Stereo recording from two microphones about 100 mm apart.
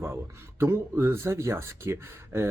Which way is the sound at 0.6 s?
25° right (ahead or behind).